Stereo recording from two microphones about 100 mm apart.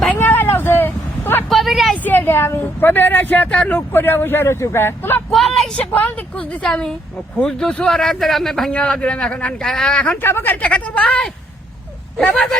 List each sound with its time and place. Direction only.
0.2 s vehicle: 20° left (ahead or behind)
1.5 s vehicle: centre (ahead or behind)
2.0 s speech: 20° left (ahead or behind)
5.3 s vehicle: centre (ahead or behind)
5.9 s a man's voice: 15° left (ahead or behind)